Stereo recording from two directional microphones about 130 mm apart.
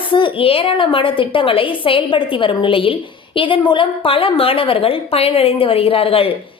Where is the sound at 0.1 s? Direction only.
40° left (ahead or behind).